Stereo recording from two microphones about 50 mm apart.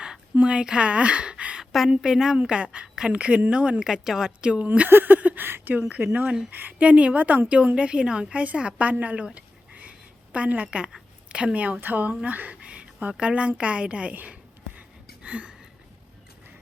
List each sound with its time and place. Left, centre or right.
0.3 s speech: centre
1.9 s a woman's voice: centre
2.4 s a woman's voice: right
3.1 s a woman's voice: right
3.8 s a woman's voice: centre; by 4.9 s right
4.9 s a woman's voice: right
5.5 s a woman's voice: right
12.5 s a sound: right
13.6 s a woman's voice: right
14.8 s a sound: right